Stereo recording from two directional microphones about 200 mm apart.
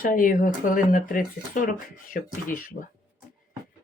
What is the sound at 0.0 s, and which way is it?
Speech, 45° left (ahead or behind).